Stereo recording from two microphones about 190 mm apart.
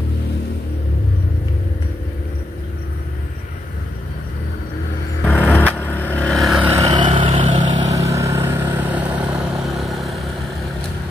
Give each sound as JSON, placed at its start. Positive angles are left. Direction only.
{"t": 5.2, "sound": "a sound", "side_deg": 10}
{"t": 5.8, "sound": "vehicle", "side_deg": 10}
{"t": 6.9, "sound": "vehicle", "side_deg": -25}
{"t": 7.9, "sound": "vehicle", "side_deg": -15}